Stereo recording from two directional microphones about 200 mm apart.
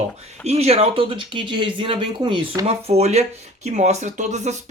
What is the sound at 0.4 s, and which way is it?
Speech, 30° right (ahead or behind).